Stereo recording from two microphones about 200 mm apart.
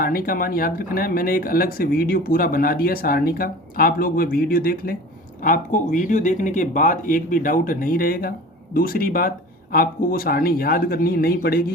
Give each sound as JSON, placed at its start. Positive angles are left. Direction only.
{"t": 0.0, "sound": "speech", "side_deg": 45}